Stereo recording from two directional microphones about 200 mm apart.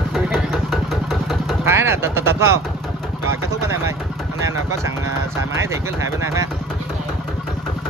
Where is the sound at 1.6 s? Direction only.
10° right (ahead or behind).